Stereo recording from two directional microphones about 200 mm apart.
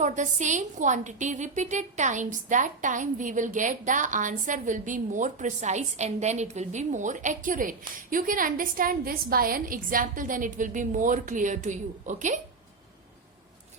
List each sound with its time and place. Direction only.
0.0 s a woman's voice: 35° right (ahead or behind)